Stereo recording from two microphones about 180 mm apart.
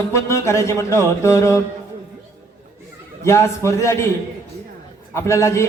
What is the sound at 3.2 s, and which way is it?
Speech, 15° left (ahead or behind).